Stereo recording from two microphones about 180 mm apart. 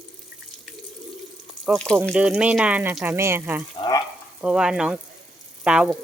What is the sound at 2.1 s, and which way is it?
Speech, 5° right (ahead or behind).